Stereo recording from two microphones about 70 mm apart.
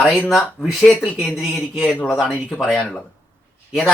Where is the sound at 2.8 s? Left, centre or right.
Centre.